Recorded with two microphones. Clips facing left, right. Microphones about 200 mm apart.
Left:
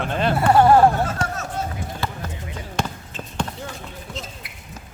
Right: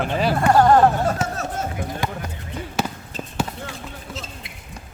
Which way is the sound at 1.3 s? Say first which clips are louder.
Right 1 dB; 35° right (ahead or behind).